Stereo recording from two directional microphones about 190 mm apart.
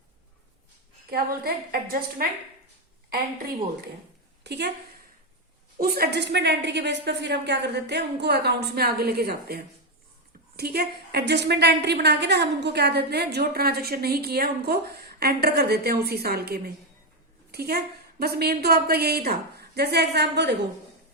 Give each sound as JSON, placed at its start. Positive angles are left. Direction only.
{"t": 1.1, "sound": "a woman's voice", "side_deg": -55}
{"t": 4.4, "sound": "a woman's voice", "side_deg": -60}
{"t": 5.7, "sound": "a woman's voice", "side_deg": -50}
{"t": 10.6, "sound": "a woman's voice", "side_deg": -55}